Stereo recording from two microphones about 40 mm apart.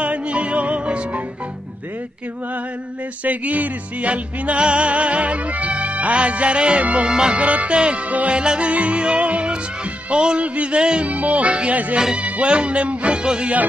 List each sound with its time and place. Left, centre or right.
0.0 s music: right
3.3 s music: right
7.1 s music: centre
7.3 s music: right
8.1 s music: right
8.4 s music: right
11.1 s music: right